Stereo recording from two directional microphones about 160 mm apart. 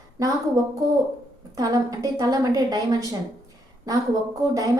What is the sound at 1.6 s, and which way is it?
A woman's voice, 25° right (ahead or behind).